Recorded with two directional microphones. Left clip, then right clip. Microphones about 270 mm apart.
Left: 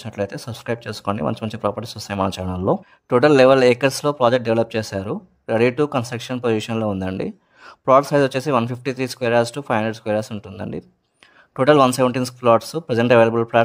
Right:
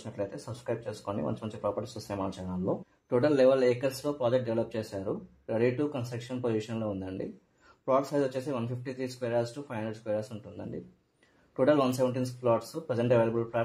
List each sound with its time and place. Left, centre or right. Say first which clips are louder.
0.0 s speech: left 10 dB; left